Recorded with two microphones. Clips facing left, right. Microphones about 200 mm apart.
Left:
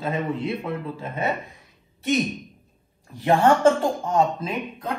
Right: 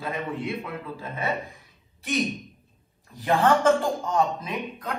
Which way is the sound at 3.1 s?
30° left (ahead or behind).